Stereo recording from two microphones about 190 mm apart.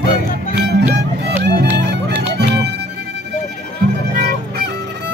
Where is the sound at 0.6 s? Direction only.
60° right (ahead or behind).